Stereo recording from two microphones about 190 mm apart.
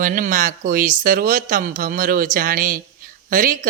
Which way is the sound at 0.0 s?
45° right (ahead or behind).